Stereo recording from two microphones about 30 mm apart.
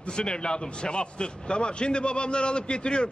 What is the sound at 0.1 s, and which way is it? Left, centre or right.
A man's voice, left.